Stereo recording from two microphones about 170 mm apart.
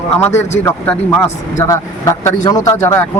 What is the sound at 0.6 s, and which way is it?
A man's voice, 15° left (ahead or behind).